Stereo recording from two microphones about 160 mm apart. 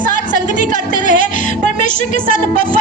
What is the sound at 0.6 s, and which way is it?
Speech, 50° left (ahead or behind).